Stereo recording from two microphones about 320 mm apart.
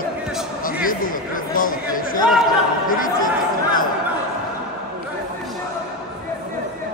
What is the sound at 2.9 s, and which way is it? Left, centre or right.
Chatter, left.